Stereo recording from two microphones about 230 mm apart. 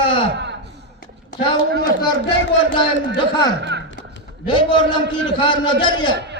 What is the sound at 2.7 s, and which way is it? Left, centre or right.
Speech, left.